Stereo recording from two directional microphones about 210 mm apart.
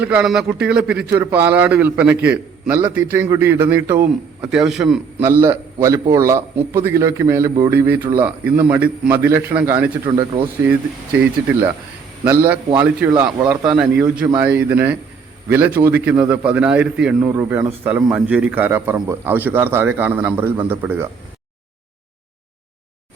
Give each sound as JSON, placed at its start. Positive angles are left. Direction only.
{"t": 0.0, "sound": "a man's voice", "side_deg": -5}
{"t": 10.1, "sound": "speech", "side_deg": -25}
{"t": 10.6, "sound": "a man's voice", "side_deg": -5}